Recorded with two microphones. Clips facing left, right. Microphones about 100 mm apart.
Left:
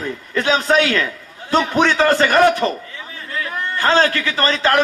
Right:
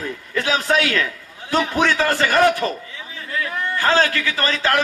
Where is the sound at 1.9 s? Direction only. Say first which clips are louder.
Left 5 dB; 35° left (ahead or behind).